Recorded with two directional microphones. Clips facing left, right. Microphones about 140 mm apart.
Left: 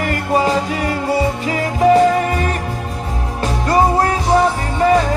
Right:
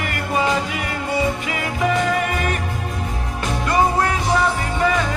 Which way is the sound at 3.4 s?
35° left (ahead or behind).